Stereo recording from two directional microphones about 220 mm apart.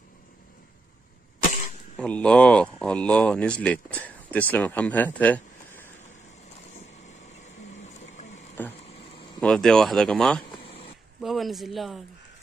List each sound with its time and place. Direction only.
2.0 s speech: 5° left (ahead or behind)
7.8 s pump: 30° left (ahead or behind)
8.8 s a sound: 25° left (ahead or behind)
9.4 s speech: 5° left (ahead or behind)
10.6 s a sound: 25° left (ahead or behind)
11.1 s speech: centre (ahead or behind)